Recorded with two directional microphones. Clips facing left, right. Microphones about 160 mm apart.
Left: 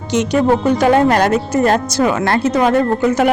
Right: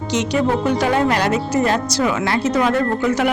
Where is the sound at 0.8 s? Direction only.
50° left (ahead or behind).